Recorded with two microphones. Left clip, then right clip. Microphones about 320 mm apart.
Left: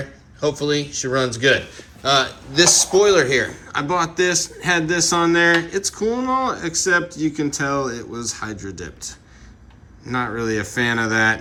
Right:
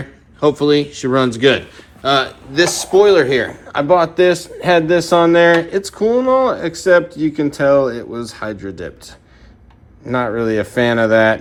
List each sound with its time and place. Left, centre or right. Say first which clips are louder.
0.3 s speech: right 7 dB; centre